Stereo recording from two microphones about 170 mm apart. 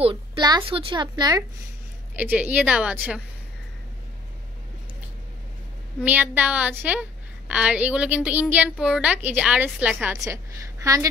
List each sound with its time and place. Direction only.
0.0 s a woman's voice: 25° right (ahead or behind)
2.1 s a woman's voice: 10° right (ahead or behind)
6.0 s a woman's voice: 10° right (ahead or behind)